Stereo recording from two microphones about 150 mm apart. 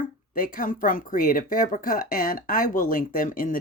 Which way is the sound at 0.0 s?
70° left (ahead or behind).